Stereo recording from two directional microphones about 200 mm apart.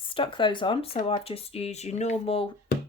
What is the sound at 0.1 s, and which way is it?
Speech, 25° left (ahead or behind).